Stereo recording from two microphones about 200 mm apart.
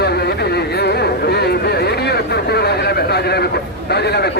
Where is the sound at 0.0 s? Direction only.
55° left (ahead or behind).